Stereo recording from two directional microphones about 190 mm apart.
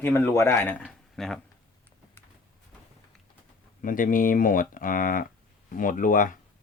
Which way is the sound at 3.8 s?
45° left (ahead or behind).